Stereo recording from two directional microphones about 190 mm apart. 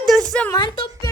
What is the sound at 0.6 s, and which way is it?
Speech, 20° left (ahead or behind).